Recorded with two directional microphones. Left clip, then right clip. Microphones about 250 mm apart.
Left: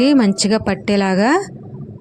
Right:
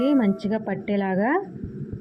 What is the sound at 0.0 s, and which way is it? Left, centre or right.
Speech, left.